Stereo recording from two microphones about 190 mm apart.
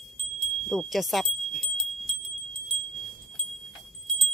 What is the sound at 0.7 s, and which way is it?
Wind chime, centre (ahead or behind).